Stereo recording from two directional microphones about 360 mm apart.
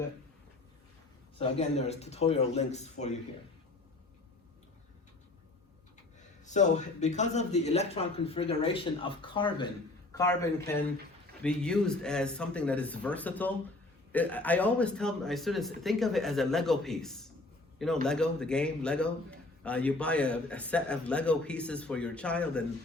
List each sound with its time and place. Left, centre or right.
1.4 s a man's voice: centre
6.4 s a man's voice: centre
11.4 s a man's voice: centre